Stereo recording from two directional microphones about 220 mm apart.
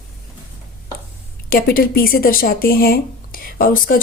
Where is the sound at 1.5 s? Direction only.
40° left (ahead or behind).